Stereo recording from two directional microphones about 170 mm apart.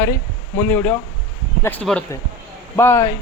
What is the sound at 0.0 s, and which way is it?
Speech, 20° left (ahead or behind).